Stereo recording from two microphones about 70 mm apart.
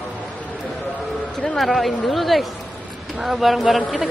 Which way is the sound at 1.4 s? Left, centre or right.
Centre.